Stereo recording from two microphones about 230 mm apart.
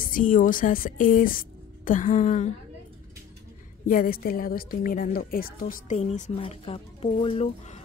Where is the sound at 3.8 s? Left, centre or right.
Left.